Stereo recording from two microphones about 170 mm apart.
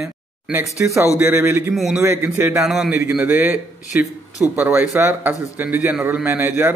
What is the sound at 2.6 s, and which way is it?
A man's voice, centre (ahead or behind).